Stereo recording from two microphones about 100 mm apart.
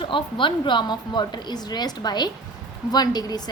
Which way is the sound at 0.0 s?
55° left (ahead or behind).